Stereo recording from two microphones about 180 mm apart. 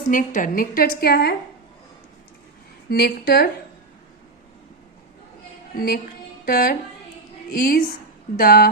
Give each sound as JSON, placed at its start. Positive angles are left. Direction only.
{"t": 0.1, "sound": "a woman's voice", "side_deg": 45}
{"t": 2.9, "sound": "a woman's voice", "side_deg": 60}
{"t": 5.7, "sound": "a woman's voice", "side_deg": 55}